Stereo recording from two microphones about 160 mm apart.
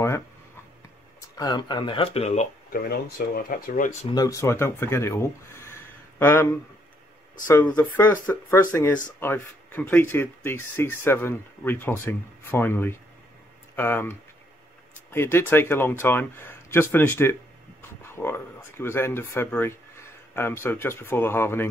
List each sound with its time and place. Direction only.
1.3 s speech: 25° left (ahead or behind); by 2.4 s 40° left (ahead or behind)
2.7 s speech: 70° left (ahead or behind)
4.1 s speech: 20° left (ahead or behind)